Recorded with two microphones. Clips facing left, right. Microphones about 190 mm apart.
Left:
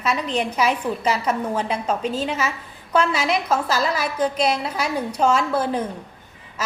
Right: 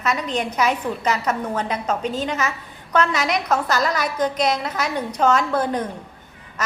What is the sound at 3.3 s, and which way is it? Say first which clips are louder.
Speech: even; 5° left (ahead or behind).